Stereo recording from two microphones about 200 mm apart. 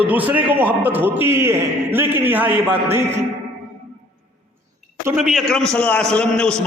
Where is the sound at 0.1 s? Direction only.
10° right (ahead or behind).